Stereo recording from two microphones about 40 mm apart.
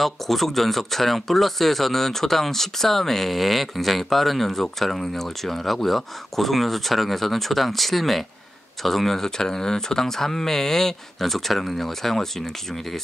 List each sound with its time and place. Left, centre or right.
0.0 s speech: centre